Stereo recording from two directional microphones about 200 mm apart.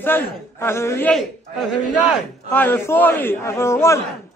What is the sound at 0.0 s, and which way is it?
A man's voice, 10° left (ahead or behind).